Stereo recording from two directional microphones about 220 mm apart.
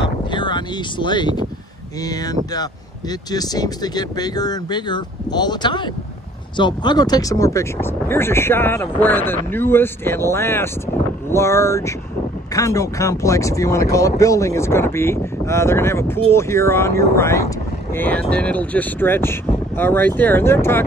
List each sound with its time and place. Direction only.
0.3 s speech: 20° left (ahead or behind)